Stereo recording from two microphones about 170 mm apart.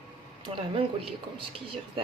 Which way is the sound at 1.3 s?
30° right (ahead or behind).